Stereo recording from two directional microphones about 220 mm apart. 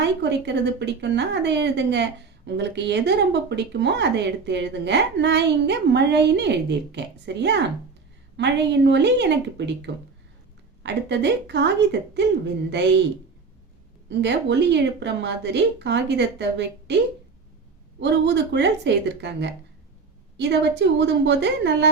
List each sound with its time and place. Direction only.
0.0 s speech: 50° right (ahead or behind)
14.1 s speech: 50° right (ahead or behind)
18.0 s speech: 50° right (ahead or behind)